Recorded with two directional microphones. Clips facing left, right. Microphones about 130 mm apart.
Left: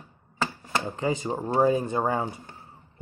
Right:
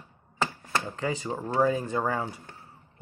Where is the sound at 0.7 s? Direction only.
20° left (ahead or behind).